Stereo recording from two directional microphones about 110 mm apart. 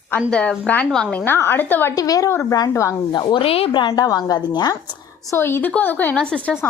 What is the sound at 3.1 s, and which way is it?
Speech, 40° left (ahead or behind).